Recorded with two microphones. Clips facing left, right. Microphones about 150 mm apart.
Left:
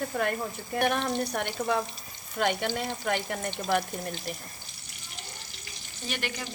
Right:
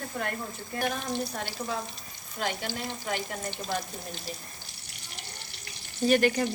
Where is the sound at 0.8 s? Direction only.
65° left (ahead or behind).